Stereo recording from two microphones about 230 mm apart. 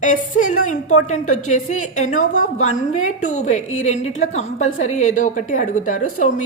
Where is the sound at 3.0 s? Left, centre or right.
Left.